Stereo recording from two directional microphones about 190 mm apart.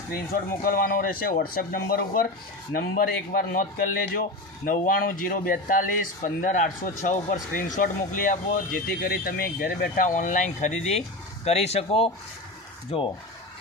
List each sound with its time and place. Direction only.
0.6 s speech: 50° left (ahead or behind); by 13.1 s 30° left (ahead or behind)